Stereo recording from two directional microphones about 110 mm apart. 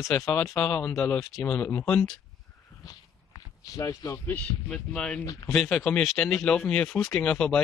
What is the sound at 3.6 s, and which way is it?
Speech, 30° left (ahead or behind).